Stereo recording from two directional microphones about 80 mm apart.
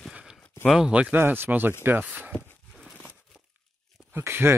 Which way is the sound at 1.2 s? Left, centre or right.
Right.